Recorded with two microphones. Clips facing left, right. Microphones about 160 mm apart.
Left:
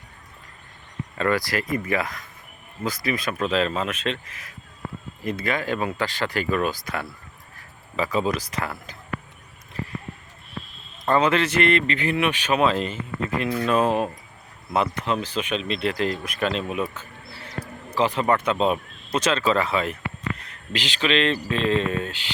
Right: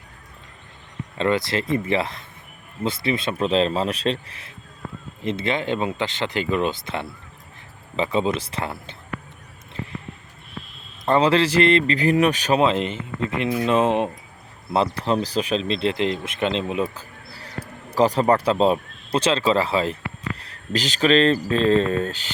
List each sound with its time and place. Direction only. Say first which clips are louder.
1.2 s speech: right 2 dB; 25° right (ahead or behind)
11.0 s speech: right 2 dB; 30° right (ahead or behind)
12.5 s speech: right 2 dB; 25° right (ahead or behind); by 22.3 s 40° right (ahead or behind)